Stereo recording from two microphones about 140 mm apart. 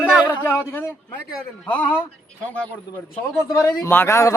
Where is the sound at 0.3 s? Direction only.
15° left (ahead or behind).